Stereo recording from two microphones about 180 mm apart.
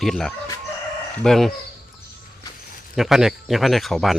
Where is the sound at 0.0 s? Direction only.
Centre (ahead or behind).